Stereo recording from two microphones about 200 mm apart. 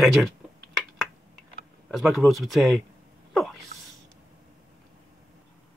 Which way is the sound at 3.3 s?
Centre (ahead or behind).